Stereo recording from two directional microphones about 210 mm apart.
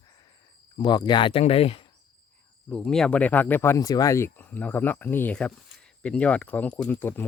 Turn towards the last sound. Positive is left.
turn(degrees=10)  # may be behind; listen again after turning